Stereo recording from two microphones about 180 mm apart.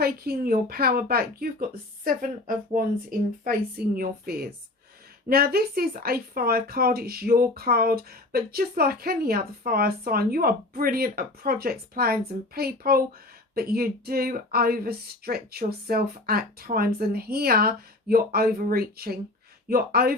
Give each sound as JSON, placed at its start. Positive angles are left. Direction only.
{"t": 0.0, "sound": "speech", "side_deg": -55}